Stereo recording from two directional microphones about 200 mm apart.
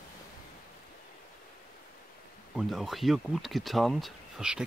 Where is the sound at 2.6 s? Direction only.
Centre (ahead or behind).